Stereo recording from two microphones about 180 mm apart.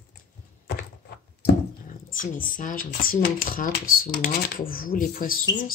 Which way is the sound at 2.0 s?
50° left (ahead or behind).